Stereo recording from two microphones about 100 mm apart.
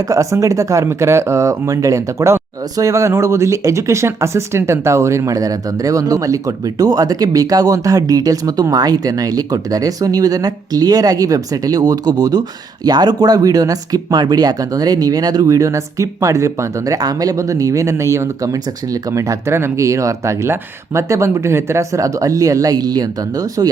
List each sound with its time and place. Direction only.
0.1 s speech: 30° right (ahead or behind)